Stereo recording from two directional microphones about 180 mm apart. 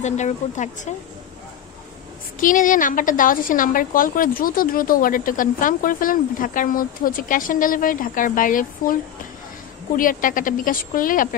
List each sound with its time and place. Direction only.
0.0 s speech: 40° left (ahead or behind)
2.4 s a woman's voice: 45° left (ahead or behind)
9.9 s a woman's voice: 50° left (ahead or behind)